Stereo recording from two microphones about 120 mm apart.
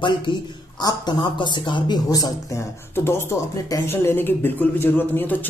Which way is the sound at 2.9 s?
20° left (ahead or behind).